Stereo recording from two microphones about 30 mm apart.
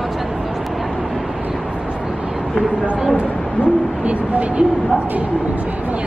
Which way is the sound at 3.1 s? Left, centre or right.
Right.